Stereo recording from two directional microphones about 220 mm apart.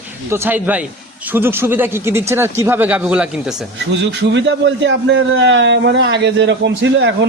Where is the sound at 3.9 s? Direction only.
55° right (ahead or behind).